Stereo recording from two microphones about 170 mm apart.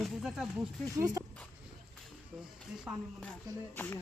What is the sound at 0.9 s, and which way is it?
Speech, 20° right (ahead or behind).